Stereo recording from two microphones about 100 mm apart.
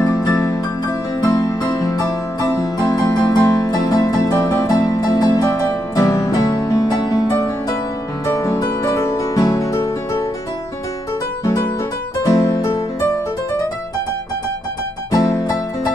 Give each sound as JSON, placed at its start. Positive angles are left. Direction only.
{"t": 0.0, "sound": "music", "side_deg": 35}
{"t": 12.2, "sound": "music", "side_deg": 35}
{"t": 15.0, "sound": "music", "side_deg": 30}